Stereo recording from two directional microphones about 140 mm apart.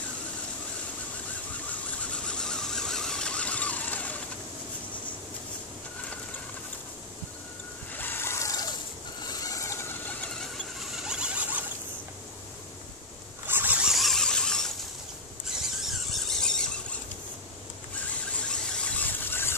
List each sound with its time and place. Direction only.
2.2 s mechanisms: 5° left (ahead or behind)
7.9 s vehicle: 15° left (ahead or behind)
9.2 s mechanisms: 25° left (ahead or behind); by 10.5 s 10° left (ahead or behind)
10.6 s zipper: 5° right (ahead or behind)
13.5 s zipper: 15° right (ahead or behind); by 14.7 s 5° left (ahead or behind)
15.8 s squeal: centre (ahead or behind)
18.5 s squeal: 5° left (ahead or behind)